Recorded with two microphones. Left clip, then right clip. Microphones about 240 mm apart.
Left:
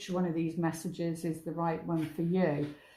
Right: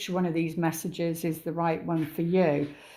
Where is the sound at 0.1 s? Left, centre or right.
Right.